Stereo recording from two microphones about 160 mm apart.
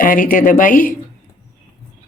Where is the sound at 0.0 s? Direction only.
60° left (ahead or behind).